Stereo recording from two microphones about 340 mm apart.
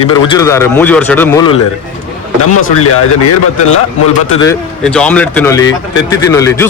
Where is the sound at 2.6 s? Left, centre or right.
Left.